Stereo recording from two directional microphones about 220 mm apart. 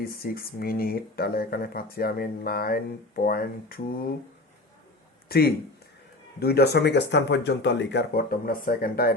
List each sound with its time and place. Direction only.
0.0 s speech: 45° left (ahead or behind)
5.3 s speech: 45° left (ahead or behind)